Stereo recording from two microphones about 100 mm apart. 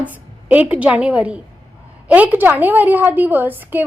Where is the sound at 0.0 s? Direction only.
15° right (ahead or behind).